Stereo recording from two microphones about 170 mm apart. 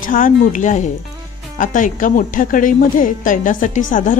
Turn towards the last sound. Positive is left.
turn(degrees=50)  # may be behind; listen again after turning